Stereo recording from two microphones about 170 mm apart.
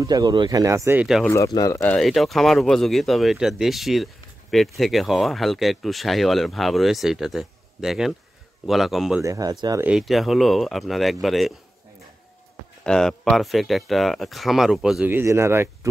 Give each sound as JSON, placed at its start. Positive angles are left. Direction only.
{"t": 0.0, "sound": "speech", "side_deg": -20}
{"t": 1.2, "sound": "speech", "side_deg": 15}
{"t": 2.0, "sound": "speech", "side_deg": 0}
{"t": 9.2, "sound": "speech", "side_deg": -20}
{"t": 9.8, "sound": "speech", "side_deg": 0}
{"t": 12.8, "sound": "speech", "side_deg": 5}